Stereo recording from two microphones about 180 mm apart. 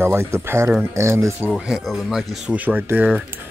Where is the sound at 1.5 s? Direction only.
Centre (ahead or behind).